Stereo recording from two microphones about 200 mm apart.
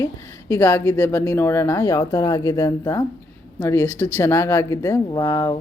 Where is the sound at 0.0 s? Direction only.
15° left (ahead or behind).